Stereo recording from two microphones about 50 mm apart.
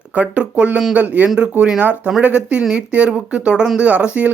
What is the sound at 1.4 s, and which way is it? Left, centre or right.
Speech, right.